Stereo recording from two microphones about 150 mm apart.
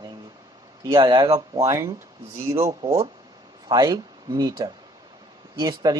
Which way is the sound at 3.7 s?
25° right (ahead or behind).